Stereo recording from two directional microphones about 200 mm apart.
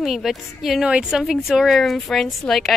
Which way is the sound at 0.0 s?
Centre (ahead or behind).